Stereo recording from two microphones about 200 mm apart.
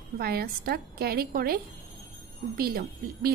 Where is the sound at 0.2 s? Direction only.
50° right (ahead or behind).